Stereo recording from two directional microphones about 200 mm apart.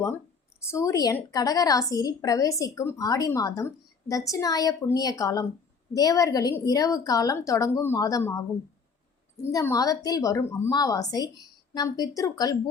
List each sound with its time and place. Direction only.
0.6 s a woman's voice: 15° left (ahead or behind)
9.5 s a woman's voice: 15° left (ahead or behind)